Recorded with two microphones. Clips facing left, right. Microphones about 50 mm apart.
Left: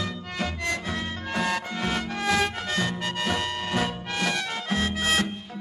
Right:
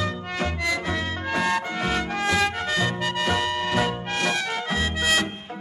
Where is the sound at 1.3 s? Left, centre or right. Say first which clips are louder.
Right 3 dB; right.